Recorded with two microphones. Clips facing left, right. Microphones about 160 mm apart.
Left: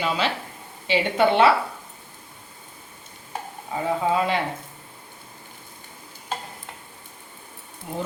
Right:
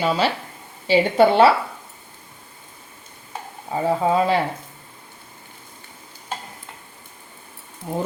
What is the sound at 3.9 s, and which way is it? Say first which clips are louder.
Speech: right 4 dB; 35° right (ahead or behind).